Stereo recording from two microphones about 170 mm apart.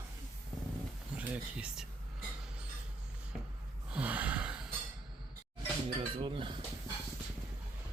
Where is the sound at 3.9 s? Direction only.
10° right (ahead or behind).